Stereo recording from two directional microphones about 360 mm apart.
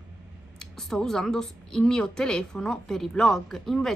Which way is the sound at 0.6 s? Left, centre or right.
Centre.